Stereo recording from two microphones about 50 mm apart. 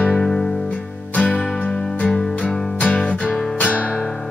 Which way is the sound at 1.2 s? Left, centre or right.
Left.